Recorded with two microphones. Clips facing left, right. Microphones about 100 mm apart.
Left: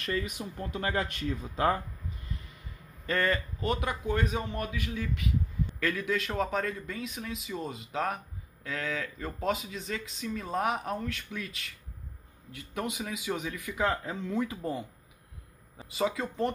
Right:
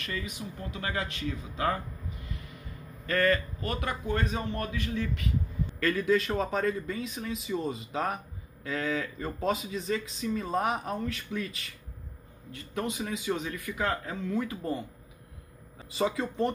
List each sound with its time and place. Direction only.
0.0 s speech: 45° left (ahead or behind)
3.1 s a man's voice: 20° left (ahead or behind)
15.8 s speech: centre (ahead or behind)